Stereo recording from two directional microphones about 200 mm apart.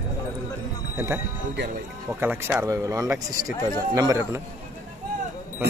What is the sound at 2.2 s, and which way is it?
Speech, 10° right (ahead or behind).